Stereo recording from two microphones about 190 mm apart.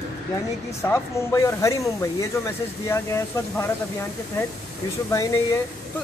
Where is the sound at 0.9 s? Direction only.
15° left (ahead or behind).